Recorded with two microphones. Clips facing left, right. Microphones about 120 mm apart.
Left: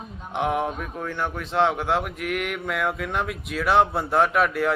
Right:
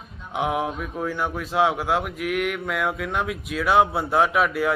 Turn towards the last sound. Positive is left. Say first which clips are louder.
# even
turn(degrees=0)  # may be behind; listen again after turning